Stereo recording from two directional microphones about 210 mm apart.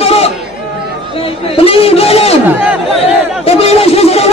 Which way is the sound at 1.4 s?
25° left (ahead or behind).